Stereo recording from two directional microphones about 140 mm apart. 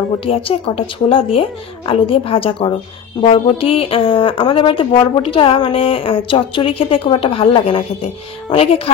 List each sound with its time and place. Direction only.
0.2 s speech: 45° left (ahead or behind)